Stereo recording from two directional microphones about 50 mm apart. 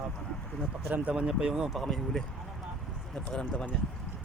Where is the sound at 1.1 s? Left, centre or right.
Centre.